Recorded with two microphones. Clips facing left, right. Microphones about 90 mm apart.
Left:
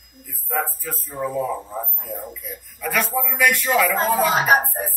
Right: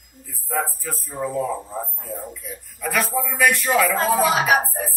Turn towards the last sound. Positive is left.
turn(degrees=40)  # may be behind; listen again after turning